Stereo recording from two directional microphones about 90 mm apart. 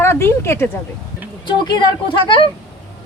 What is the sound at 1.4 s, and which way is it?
Speech, 60° left (ahead or behind).